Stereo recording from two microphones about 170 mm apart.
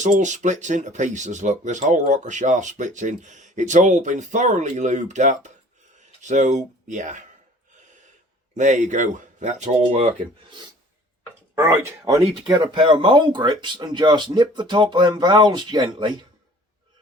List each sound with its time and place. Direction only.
0.0 s speech: 45° right (ahead or behind)
8.5 s speech: 45° right (ahead or behind)
11.5 s speech: 15° right (ahead or behind)
12.5 s speech: 30° right (ahead or behind)